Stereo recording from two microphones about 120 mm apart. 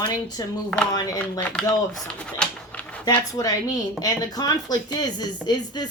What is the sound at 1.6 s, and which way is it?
Speech, 5° left (ahead or behind).